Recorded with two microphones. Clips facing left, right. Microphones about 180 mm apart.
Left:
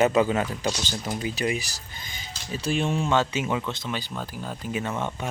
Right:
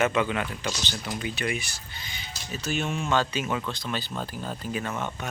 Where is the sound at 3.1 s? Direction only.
25° left (ahead or behind).